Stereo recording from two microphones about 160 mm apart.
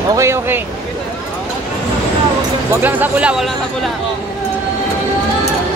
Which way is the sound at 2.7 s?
10° right (ahead or behind).